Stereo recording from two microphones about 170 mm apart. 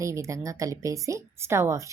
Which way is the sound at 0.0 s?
20° right (ahead or behind).